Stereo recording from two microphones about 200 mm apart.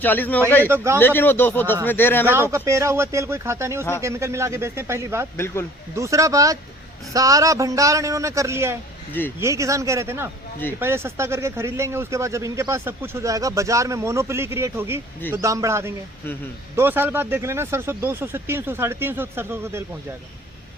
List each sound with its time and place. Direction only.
0.0 s speech: 10° left (ahead or behind)
2.2 s speech: 10° right (ahead or behind)